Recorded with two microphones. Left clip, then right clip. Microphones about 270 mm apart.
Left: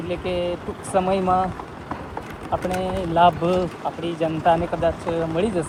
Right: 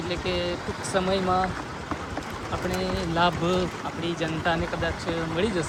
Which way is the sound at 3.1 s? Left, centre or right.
Centre.